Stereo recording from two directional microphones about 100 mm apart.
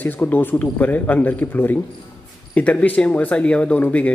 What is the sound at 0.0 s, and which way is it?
Speech, 15° left (ahead or behind).